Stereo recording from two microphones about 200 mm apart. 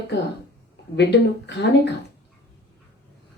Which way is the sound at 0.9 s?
60° left (ahead or behind).